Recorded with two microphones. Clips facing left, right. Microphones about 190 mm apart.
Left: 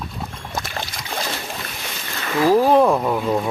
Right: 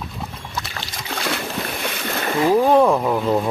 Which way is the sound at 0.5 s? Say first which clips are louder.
Left 5 dB; 45° left (ahead or behind).